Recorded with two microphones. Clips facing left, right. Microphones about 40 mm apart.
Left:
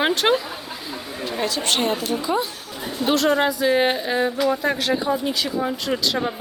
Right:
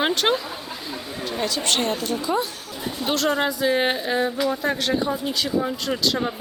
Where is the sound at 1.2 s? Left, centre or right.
Centre.